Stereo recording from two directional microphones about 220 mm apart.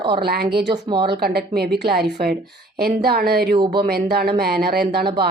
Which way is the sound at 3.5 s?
20° right (ahead or behind).